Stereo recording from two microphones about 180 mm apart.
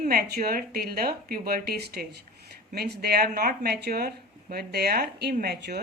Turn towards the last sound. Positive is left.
turn(degrees=-60)  # may be behind; listen again after turning